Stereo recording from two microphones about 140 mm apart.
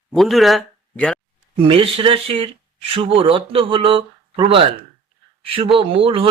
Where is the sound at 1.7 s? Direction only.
40° right (ahead or behind).